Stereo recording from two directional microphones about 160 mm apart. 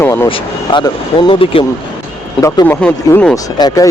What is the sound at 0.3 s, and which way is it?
Speech, 30° left (ahead or behind).